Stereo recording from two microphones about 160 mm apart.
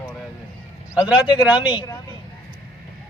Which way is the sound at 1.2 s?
30° left (ahead or behind).